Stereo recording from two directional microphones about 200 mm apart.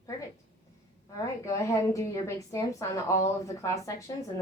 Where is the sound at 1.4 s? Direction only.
15° left (ahead or behind).